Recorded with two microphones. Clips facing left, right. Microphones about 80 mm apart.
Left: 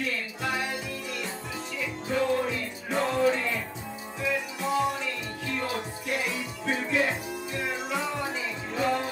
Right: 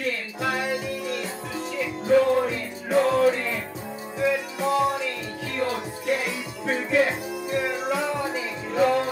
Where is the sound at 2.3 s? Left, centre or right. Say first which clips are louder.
Right 4 dB; right.